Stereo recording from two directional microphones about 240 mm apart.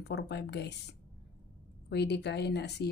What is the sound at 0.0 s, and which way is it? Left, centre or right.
Speech, left.